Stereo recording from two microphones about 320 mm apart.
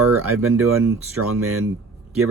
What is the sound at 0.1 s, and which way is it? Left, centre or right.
Speech, right.